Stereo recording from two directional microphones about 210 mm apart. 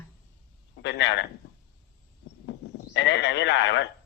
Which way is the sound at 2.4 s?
55° left (ahead or behind).